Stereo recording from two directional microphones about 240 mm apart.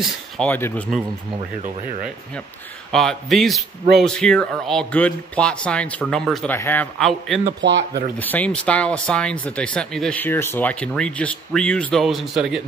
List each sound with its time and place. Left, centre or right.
0.0 s speech: centre
2.9 s speech: centre
7.4 s speech: right
8.2 s speech: centre